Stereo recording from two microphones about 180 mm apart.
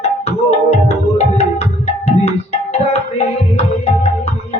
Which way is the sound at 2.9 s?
35° left (ahead or behind).